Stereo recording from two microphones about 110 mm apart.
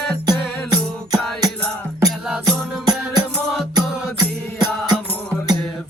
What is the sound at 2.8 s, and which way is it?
Music, 35° right (ahead or behind).